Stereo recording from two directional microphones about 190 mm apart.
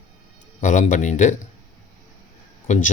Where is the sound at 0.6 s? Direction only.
40° left (ahead or behind).